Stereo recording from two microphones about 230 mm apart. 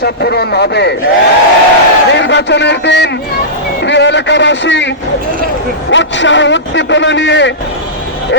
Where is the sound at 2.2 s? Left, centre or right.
Left.